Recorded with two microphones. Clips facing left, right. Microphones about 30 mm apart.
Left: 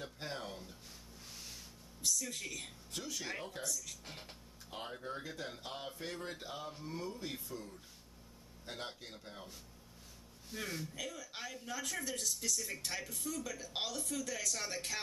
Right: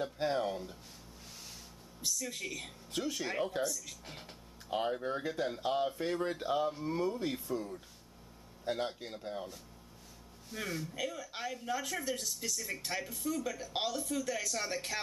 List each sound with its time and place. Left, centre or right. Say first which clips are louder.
0.0 s speech: right 11 dB; centre
2.0 s speech: right 1 dB; centre
2.9 s speech: right 7 dB; right; by 4.4 s centre
4.6 s speech: right 10 dB; centre
10.5 s speech: right 3 dB; centre